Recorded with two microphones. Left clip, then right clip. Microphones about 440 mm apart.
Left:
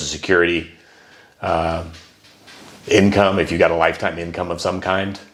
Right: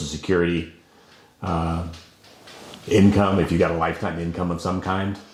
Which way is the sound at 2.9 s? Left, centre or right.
Left.